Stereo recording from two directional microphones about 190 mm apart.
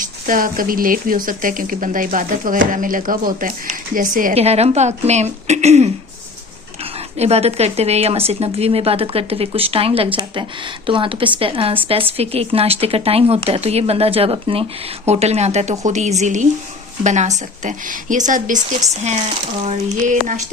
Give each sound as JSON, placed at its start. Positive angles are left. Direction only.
{"t": 0.0, "sound": "speech", "side_deg": -45}
{"t": 7.2, "sound": "speech", "side_deg": -35}
{"t": 19.6, "sound": "speech", "side_deg": -40}